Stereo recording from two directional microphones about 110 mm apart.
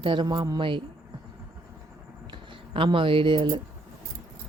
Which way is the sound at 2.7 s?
50° right (ahead or behind).